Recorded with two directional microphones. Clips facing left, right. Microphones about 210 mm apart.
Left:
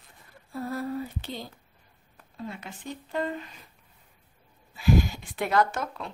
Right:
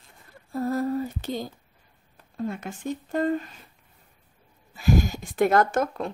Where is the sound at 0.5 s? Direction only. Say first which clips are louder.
Right 6 dB; 45° right (ahead or behind).